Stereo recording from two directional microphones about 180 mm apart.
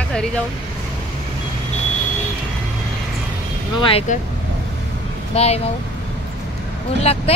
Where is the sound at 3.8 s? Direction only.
30° left (ahead or behind).